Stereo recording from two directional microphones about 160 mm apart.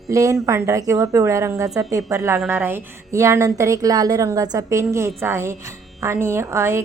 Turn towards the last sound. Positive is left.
turn(degrees=-15)  # may be behind; listen again after turning